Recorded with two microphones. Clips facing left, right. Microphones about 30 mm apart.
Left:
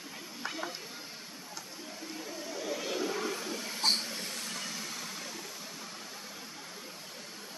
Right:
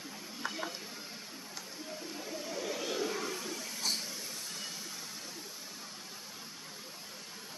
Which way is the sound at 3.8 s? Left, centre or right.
Left.